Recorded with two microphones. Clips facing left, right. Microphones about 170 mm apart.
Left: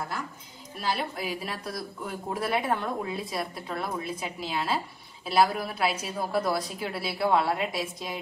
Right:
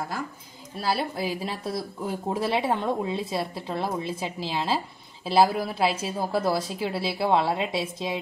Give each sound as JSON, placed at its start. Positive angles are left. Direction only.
{"t": 0.7, "sound": "speech", "side_deg": -35}